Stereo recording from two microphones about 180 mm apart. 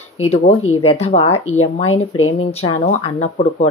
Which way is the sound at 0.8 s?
35° left (ahead or behind).